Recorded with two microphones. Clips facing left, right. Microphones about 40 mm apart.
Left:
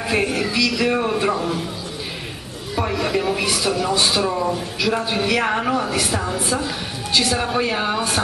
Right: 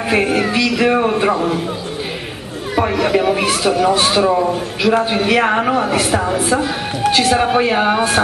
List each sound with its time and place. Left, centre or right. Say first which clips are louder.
0.3 s music: right 5 dB; right
0.7 s speech: right 5 dB; right
2.9 s speech: right 5 dB; right